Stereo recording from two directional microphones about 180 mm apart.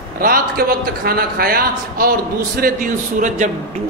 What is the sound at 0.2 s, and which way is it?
A man's voice, 55° right (ahead or behind).